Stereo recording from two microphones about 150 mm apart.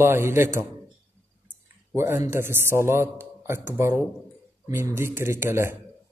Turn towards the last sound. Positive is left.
turn(degrees=-15)  # may be behind; listen again after turning